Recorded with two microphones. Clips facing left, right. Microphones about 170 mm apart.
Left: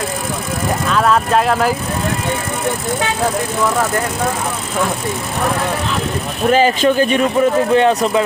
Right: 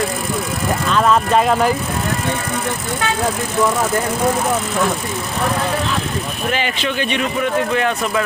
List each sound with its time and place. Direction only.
0.9 s speech: centre (ahead or behind)
6.5 s speech: 40° left (ahead or behind)
7.7 s speech: 30° left (ahead or behind)